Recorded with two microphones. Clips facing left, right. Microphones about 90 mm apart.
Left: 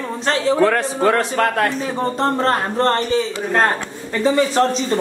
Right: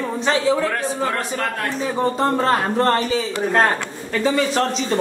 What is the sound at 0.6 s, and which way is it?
A man's voice, 80° left.